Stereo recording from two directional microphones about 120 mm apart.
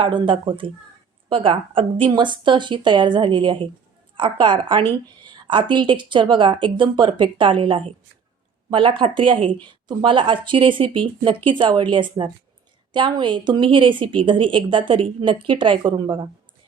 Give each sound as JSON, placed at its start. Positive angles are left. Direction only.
{"t": 0.0, "sound": "a woman's voice", "side_deg": -40}